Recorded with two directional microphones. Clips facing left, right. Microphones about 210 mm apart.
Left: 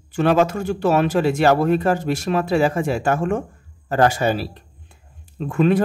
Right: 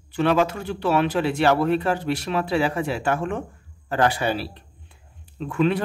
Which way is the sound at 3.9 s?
45° left (ahead or behind).